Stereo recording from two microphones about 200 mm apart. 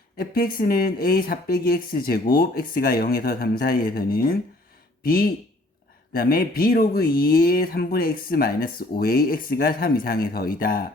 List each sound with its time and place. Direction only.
0.2 s speech: 45° left (ahead or behind)